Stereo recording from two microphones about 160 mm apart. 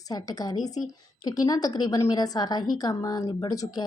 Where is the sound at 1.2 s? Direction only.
25° left (ahead or behind).